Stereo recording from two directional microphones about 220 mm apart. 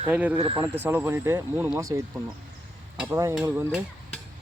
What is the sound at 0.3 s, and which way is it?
Speech, 25° right (ahead or behind).